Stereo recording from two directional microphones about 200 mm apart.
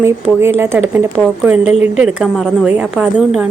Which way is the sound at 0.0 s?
10° right (ahead or behind).